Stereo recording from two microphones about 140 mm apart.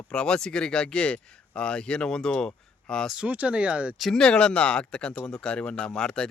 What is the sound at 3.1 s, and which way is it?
Speech, 10° right (ahead or behind).